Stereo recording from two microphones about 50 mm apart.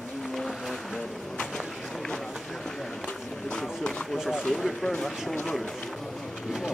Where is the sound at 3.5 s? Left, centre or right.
Centre.